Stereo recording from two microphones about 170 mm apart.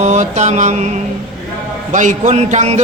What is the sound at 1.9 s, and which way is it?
Music, 45° right (ahead or behind).